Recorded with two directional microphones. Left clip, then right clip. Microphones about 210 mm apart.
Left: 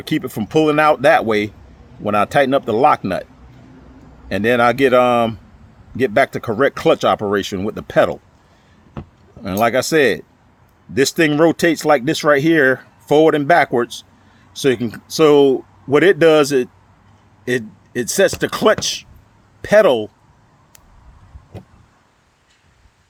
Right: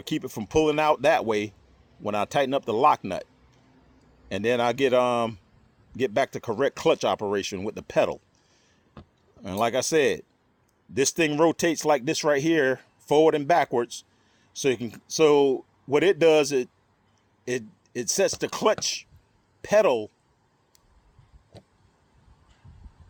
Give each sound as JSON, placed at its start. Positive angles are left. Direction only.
{"t": 0.0, "sound": "speech", "side_deg": -25}
{"t": 4.3, "sound": "speech", "side_deg": -25}
{"t": 9.4, "sound": "speech", "side_deg": -25}